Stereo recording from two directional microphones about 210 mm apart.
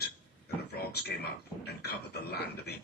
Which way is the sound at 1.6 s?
50° left (ahead or behind).